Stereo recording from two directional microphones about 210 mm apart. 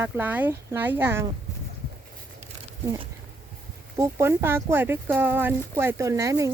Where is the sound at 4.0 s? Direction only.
15° right (ahead or behind).